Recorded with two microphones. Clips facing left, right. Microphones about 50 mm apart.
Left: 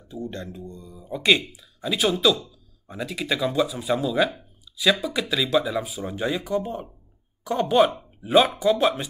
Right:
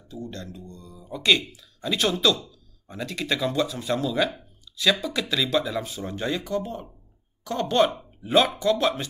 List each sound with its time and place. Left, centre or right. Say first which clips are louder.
0.1 s speech: left 3 dB; left